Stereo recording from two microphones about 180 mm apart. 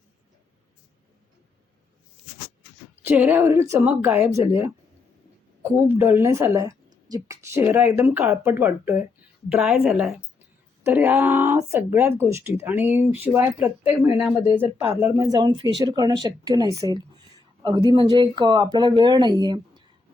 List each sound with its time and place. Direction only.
3.0 s a woman's voice: 10° right (ahead or behind)